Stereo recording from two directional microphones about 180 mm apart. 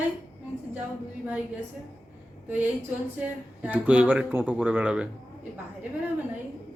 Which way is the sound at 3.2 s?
10° right (ahead or behind).